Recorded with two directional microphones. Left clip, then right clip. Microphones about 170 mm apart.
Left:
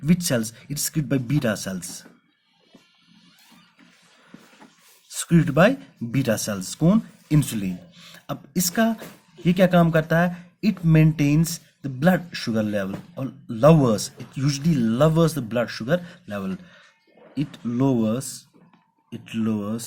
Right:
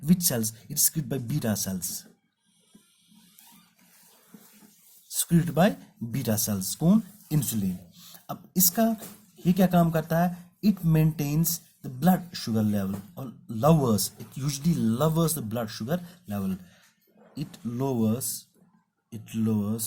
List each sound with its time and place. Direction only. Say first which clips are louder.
0.0 s speech: left 4 dB; 30° left (ahead or behind)
5.1 s speech: left 6 dB; 30° left (ahead or behind)